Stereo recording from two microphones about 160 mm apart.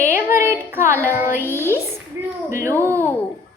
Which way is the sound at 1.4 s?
15° left (ahead or behind).